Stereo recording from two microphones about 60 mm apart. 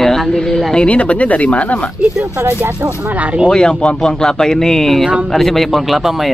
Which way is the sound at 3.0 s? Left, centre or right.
Right.